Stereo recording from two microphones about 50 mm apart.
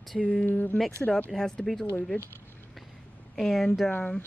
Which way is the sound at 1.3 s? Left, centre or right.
Centre.